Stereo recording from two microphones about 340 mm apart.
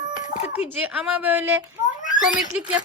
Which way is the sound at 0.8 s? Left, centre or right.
Centre.